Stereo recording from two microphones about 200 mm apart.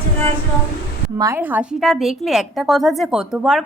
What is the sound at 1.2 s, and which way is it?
A woman's voice, 15° right (ahead or behind).